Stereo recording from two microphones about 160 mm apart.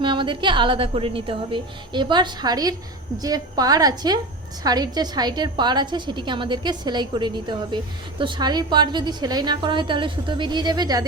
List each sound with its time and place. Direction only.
0.0 s a woman's voice: 30° right (ahead or behind)